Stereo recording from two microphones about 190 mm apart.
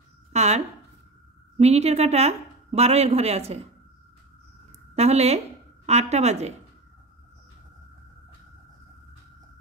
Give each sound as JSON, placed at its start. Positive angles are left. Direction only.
{"t": 0.3, "sound": "a sound", "side_deg": -35}
{"t": 1.6, "sound": "a woman's voice", "side_deg": -35}
{"t": 4.9, "sound": "a woman's voice", "side_deg": -35}